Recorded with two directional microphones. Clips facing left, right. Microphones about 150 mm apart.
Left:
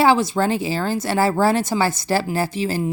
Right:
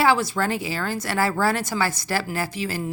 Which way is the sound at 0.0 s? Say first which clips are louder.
Left 4 dB; 25° left (ahead or behind).